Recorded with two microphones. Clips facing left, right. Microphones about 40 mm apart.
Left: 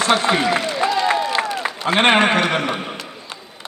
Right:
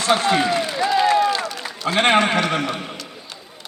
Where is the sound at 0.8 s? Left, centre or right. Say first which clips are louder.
Right 4 dB; left.